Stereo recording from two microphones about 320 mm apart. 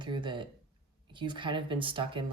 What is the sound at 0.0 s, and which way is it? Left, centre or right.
Speech, centre.